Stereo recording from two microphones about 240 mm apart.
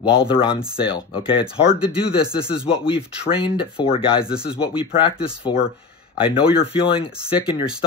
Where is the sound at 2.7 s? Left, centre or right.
Centre.